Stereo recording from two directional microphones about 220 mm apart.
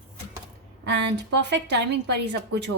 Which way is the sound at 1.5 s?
50° right (ahead or behind).